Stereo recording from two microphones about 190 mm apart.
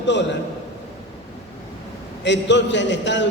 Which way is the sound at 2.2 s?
70° left (ahead or behind).